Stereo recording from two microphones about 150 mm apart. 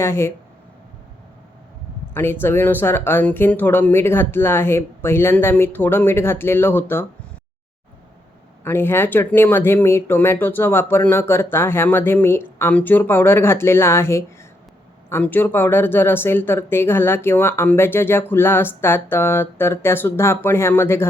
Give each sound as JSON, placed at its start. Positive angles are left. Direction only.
{"t": 0.0, "sound": "speech", "side_deg": 20}
{"t": 2.1, "sound": "speech", "side_deg": 15}
{"t": 8.6, "sound": "speech", "side_deg": 15}